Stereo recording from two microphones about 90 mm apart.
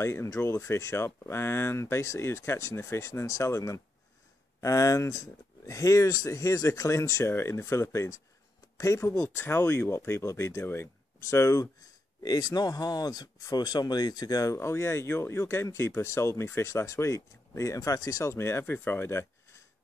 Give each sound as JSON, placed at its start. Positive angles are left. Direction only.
{"t": 0.0, "sound": "speech", "side_deg": 30}
{"t": 12.2, "sound": "speech", "side_deg": 50}